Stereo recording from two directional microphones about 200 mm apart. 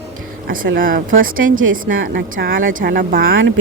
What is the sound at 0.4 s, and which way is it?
A woman's voice, 45° right (ahead or behind).